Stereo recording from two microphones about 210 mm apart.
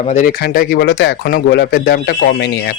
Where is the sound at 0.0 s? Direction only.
35° left (ahead or behind).